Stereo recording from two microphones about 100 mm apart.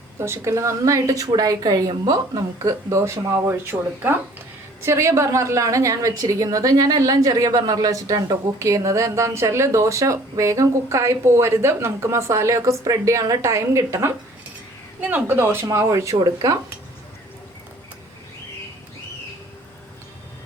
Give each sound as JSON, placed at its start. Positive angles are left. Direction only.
{"t": 0.2, "sound": "a woman's voice", "side_deg": -25}
{"t": 15.6, "sound": "a woman's voice", "side_deg": -30}